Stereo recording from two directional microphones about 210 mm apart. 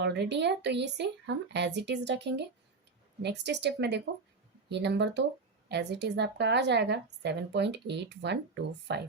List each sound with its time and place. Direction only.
0.0 s a woman's voice: 55° right (ahead or behind)